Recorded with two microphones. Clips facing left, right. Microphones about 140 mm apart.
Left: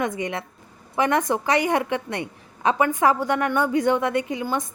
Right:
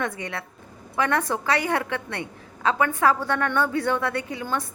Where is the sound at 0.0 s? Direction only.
20° left (ahead or behind).